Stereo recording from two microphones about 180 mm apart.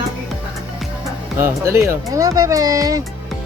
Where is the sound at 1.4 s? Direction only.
15° right (ahead or behind).